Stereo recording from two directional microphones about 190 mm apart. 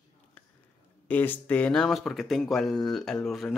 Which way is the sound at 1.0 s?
10° left (ahead or behind).